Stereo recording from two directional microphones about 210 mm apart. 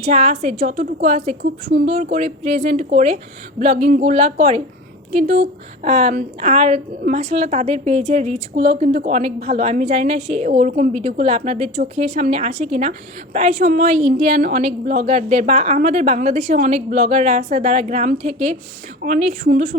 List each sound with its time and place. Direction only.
0.0 s a woman's voice: 30° right (ahead or behind)
3.8 s speech: 45° right (ahead or behind)
4.1 s a woman's voice: 30° right (ahead or behind)